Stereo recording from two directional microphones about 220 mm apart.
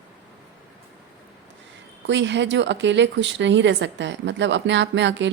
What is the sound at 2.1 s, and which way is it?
Speech, 55° right (ahead or behind).